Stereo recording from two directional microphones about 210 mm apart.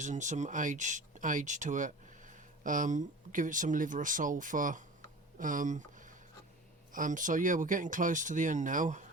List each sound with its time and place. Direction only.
0.0 s speech: 35° right (ahead or behind)